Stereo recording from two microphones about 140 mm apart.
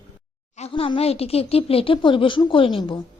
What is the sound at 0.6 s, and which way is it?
Speech, 40° left (ahead or behind).